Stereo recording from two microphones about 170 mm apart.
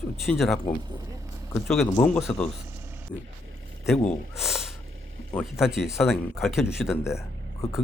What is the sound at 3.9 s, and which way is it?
Speech, centre (ahead or behind).